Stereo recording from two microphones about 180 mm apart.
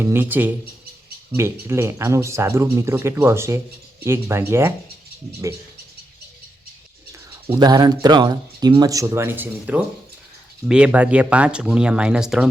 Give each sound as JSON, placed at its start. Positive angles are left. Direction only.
{"t": 0.0, "sound": "speech", "side_deg": -10}
{"t": 7.4, "sound": "speech", "side_deg": -20}